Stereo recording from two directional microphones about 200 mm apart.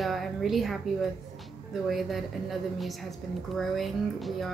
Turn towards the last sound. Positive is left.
turn(degrees=0)  # may be behind; listen again after turning